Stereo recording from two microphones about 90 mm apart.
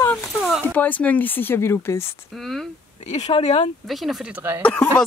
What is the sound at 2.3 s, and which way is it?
Speech, centre (ahead or behind).